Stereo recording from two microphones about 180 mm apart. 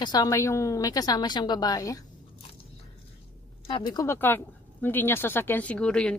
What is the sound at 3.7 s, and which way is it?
A woman's voice, 25° left (ahead or behind).